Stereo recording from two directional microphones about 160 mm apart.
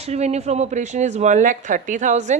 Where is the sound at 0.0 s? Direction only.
45° right (ahead or behind).